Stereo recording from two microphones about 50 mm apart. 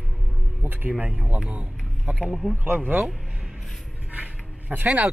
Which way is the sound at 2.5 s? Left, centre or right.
Right.